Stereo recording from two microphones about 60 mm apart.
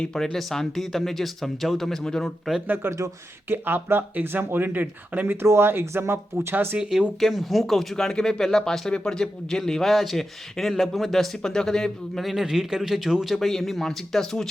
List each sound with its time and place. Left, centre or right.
0.0 s speech: centre
2.6 s speech: right
7.2 s speech: centre